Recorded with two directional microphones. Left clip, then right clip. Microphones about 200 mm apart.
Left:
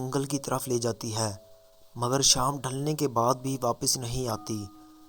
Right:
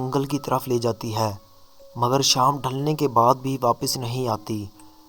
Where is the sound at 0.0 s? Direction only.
30° left (ahead or behind).